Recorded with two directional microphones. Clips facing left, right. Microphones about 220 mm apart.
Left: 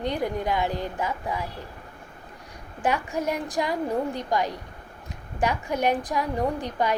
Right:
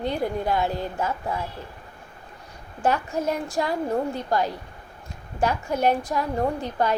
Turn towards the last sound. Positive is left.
turn(degrees=15)  # may be behind; listen again after turning